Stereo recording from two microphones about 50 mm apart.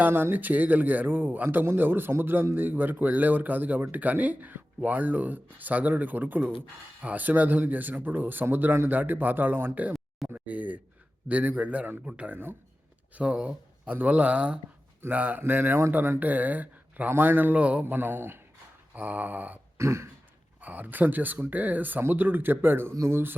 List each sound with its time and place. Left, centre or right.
0.1 s speech: right
0.3 s speech: right
2.6 s speech: right
10.3 s speech: right
17.8 s speech: right
18.9 s speech: right
19.8 s speech: right
20.6 s speech: right
23.0 s speech: right